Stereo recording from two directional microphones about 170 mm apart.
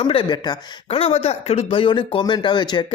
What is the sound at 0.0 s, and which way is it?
Speech, 30° left (ahead or behind).